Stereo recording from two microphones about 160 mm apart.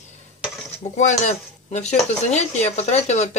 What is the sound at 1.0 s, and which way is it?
Speech, 45° left (ahead or behind).